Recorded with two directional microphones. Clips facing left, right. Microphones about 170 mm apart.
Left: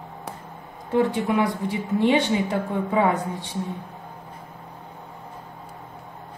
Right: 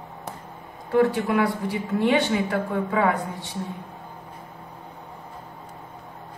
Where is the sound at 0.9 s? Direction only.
20° left (ahead or behind).